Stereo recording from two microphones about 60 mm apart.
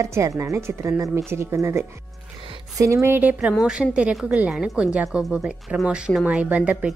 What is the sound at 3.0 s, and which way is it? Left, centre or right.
Speech, right.